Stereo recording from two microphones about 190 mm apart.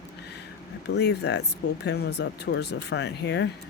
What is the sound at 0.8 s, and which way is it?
Speech, 60° left (ahead or behind).